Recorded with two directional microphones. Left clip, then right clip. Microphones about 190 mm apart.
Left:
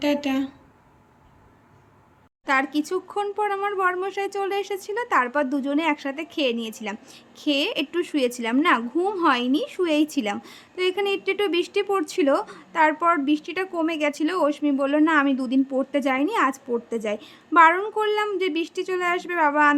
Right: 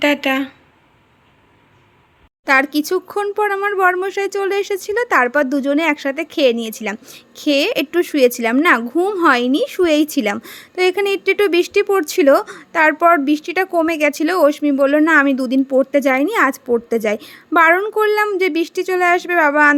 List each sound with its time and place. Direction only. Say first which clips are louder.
0.0 s speech: right 8 dB; centre (ahead or behind)
2.4 s a woman's voice: right 8 dB; 25° right (ahead or behind)
9.0 s a woman's voice: right 7 dB; 15° right (ahead or behind)
9.2 s a woman's voice: right 8 dB; 25° right (ahead or behind)